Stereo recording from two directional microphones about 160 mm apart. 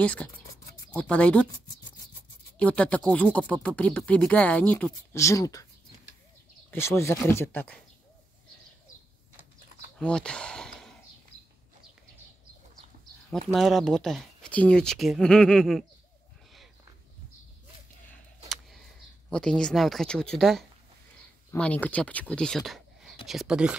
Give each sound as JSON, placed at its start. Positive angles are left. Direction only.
{"t": 0.0, "sound": "speech", "side_deg": 10}
{"t": 2.6, "sound": "speech", "side_deg": 5}
{"t": 6.7, "sound": "speech", "side_deg": 15}
{"t": 9.9, "sound": "a sound", "side_deg": 5}
{"t": 13.5, "sound": "speech", "side_deg": 0}
{"t": 19.2, "sound": "speech", "side_deg": 5}